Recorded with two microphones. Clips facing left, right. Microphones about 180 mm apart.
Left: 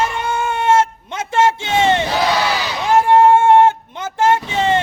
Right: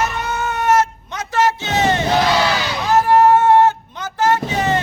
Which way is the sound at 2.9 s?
25° left (ahead or behind).